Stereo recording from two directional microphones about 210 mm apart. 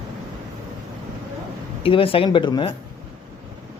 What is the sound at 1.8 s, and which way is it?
Speech, 25° left (ahead or behind).